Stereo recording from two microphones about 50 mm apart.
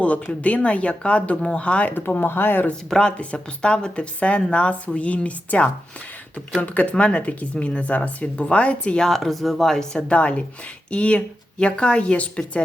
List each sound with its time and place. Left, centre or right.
0.0 s speech: left
2.0 s speech: left
2.9 s speech: centre
9.0 s speech: centre
10.1 s speech: left